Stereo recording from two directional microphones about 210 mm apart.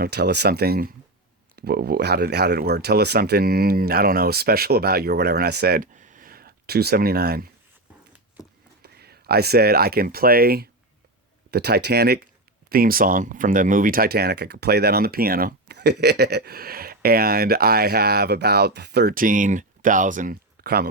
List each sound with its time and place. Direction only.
0.0 s speech: 50° right (ahead or behind)
8.8 s speech: 50° right (ahead or behind)